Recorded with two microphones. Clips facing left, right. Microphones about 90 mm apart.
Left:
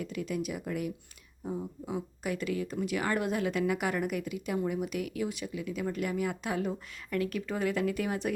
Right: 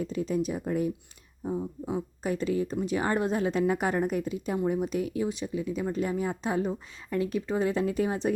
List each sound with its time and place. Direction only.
0.0 s a woman's voice: 30° right (ahead or behind)